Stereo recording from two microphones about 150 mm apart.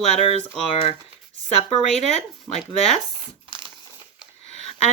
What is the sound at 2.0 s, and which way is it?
Speech, 45° left (ahead or behind).